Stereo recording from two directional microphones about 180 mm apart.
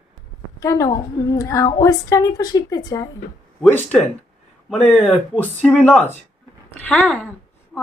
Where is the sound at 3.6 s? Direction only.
Centre (ahead or behind).